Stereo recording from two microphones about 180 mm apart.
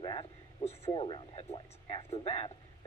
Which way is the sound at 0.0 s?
30° left (ahead or behind).